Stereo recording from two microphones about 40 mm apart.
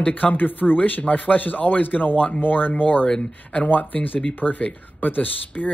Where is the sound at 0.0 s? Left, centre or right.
Left.